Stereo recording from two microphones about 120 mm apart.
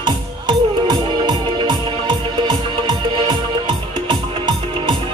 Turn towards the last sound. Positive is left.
turn(degrees=-40)  # may be behind; listen again after turning